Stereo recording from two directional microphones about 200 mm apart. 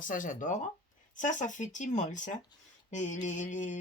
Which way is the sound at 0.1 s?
40° left (ahead or behind).